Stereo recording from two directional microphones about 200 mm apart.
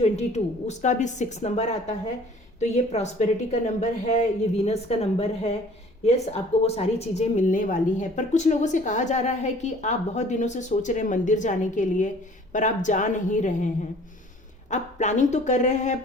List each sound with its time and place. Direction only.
0.0 s a woman's voice: 35° left (ahead or behind)
14.7 s a woman's voice: 35° left (ahead or behind)